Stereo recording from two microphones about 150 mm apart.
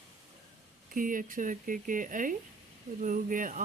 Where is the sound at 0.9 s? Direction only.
65° right (ahead or behind).